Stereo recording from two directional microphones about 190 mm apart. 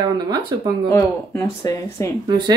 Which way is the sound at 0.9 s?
15° left (ahead or behind).